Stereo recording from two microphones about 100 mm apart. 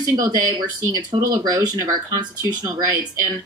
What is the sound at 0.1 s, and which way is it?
Speech, 40° right (ahead or behind).